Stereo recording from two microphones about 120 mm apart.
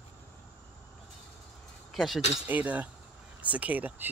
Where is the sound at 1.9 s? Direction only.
Centre (ahead or behind).